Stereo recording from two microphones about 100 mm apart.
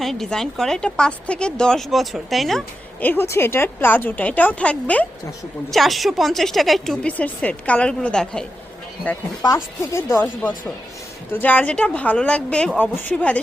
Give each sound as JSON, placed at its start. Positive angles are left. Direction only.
{"t": 0.0, "sound": "a woman's voice", "side_deg": 5}
{"t": 3.0, "sound": "a woman's voice", "side_deg": 20}
{"t": 5.7, "sound": "a woman's voice", "side_deg": 0}
{"t": 7.1, "sound": "a woman's voice", "side_deg": 15}
{"t": 9.9, "sound": "a woman's voice", "side_deg": 25}